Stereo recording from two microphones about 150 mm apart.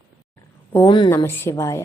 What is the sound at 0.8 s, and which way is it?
Speech, 30° left (ahead or behind).